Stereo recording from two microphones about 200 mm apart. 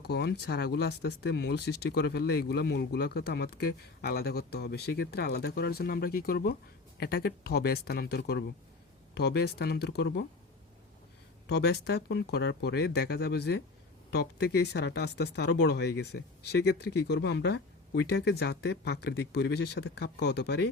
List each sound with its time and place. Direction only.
0.0 s speech: 55° left (ahead or behind)
11.4 s speech: 55° left (ahead or behind)